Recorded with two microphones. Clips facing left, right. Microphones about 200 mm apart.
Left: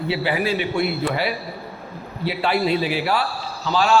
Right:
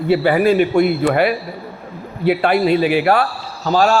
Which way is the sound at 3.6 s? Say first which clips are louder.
Right 4 dB; 45° right (ahead or behind).